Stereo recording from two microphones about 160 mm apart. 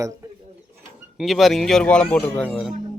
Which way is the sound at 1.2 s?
Centre (ahead or behind).